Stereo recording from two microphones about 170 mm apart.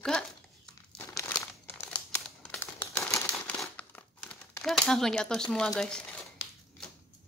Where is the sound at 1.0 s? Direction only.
15° left (ahead or behind).